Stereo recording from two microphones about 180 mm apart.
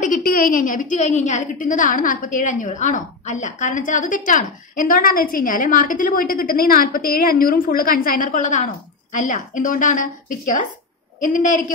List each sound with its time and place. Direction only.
0.0 s a woman's voice: 50° left (ahead or behind)